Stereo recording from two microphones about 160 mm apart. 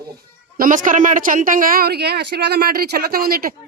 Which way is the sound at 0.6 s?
55° right (ahead or behind).